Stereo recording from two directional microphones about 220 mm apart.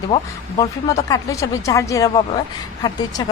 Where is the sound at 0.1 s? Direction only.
20° left (ahead or behind).